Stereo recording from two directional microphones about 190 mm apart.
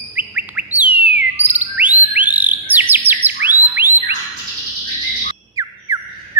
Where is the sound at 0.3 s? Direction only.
10° right (ahead or behind).